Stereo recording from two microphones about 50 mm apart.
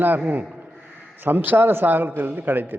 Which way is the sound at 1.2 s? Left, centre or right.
Right.